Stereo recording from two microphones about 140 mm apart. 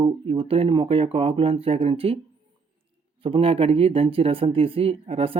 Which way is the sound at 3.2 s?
40° right (ahead or behind).